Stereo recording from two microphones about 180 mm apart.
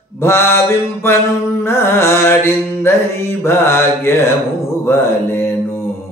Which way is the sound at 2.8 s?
15° left (ahead or behind).